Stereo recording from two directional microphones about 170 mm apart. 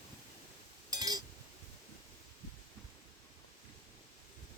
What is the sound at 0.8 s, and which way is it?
Chink, 25° right (ahead or behind).